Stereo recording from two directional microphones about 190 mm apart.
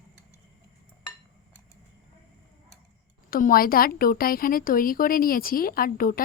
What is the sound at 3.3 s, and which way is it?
Speech, 45° left (ahead or behind).